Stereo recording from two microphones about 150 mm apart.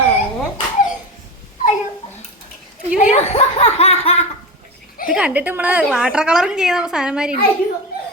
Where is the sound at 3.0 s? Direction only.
50° left (ahead or behind).